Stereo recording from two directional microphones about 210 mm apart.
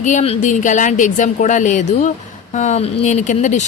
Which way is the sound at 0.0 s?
35° left (ahead or behind).